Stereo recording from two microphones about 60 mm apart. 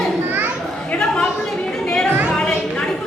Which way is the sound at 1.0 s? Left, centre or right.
Centre.